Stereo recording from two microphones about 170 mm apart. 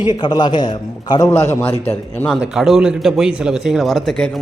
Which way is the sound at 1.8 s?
10° left (ahead or behind).